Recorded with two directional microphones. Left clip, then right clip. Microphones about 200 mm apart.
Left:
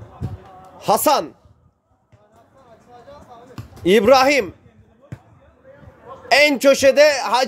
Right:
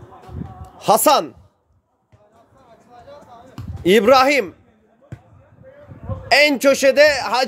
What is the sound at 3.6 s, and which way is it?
Speech, 10° right (ahead or behind).